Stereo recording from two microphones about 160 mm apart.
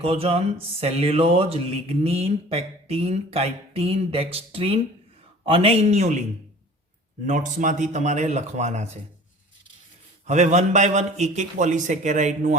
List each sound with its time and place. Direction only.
0.0 s speech: 35° right (ahead or behind)
7.3 s a man's voice: 50° right (ahead or behind)
10.2 s a man's voice: 45° right (ahead or behind)